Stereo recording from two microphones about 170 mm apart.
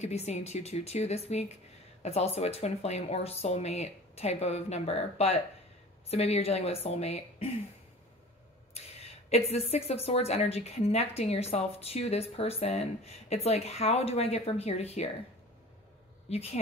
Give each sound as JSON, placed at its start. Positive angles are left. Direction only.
{"t": 0.0, "sound": "a woman's voice", "side_deg": 40}
{"t": 9.3, "sound": "a woman's voice", "side_deg": 35}
{"t": 16.3, "sound": "speech", "side_deg": 35}